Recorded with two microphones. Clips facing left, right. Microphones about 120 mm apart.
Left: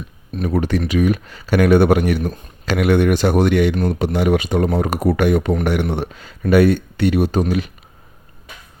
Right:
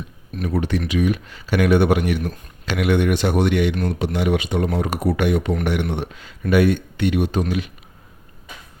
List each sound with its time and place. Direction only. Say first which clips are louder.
0.4 s speech: left 3 dB; 45° left (ahead or behind)